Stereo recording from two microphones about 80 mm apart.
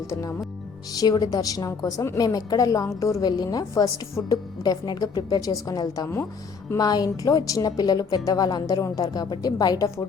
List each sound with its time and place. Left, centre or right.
0.1 s a woman's voice: left
0.9 s a woman's voice: left